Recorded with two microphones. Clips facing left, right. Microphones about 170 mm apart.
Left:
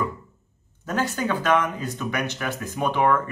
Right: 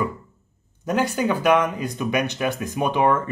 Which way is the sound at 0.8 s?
15° right (ahead or behind).